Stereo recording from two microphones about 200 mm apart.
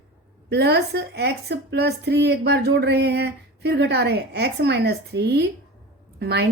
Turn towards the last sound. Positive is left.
turn(degrees=-55)  # may be behind; listen again after turning